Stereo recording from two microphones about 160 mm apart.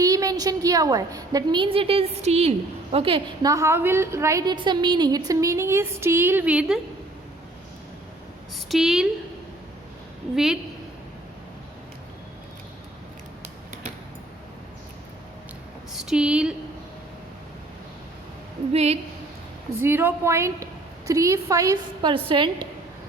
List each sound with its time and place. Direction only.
0.0 s a woman's voice: 20° right (ahead or behind)
3.4 s a woman's voice: 20° right (ahead or behind)
8.5 s a woman's voice: centre (ahead or behind)
10.3 s a woman's voice: 5° right (ahead or behind)
16.0 s a woman's voice: 5° right (ahead or behind)
18.7 s a woman's voice: 40° right (ahead or behind)
19.7 s a woman's voice: 15° right (ahead or behind); by 22.4 s 30° right (ahead or behind)